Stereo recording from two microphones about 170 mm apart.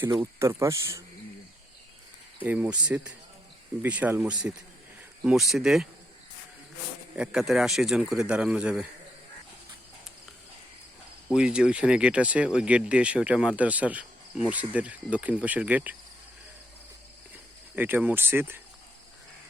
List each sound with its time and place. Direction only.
0.2 s speech: 15° right (ahead or behind)
2.4 s a man's voice: 10° right (ahead or behind)
7.2 s a man's voice: 5° right (ahead or behind)
11.3 s speech: 5° right (ahead or behind)
17.7 s speech: 10° right (ahead or behind)